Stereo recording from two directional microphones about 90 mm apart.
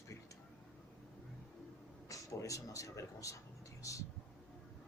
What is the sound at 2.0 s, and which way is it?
A man's voice, 40° left (ahead or behind).